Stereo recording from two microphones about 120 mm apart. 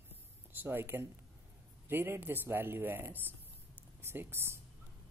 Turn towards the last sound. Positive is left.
turn(degrees=-20)  # may be behind; listen again after turning